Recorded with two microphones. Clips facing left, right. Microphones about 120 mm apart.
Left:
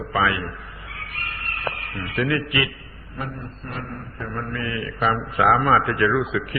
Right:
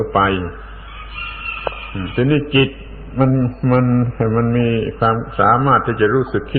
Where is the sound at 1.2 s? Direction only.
25° right (ahead or behind).